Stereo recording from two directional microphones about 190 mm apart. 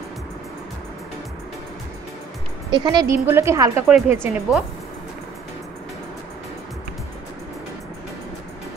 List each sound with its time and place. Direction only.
2.7 s a woman's voice: 20° right (ahead or behind)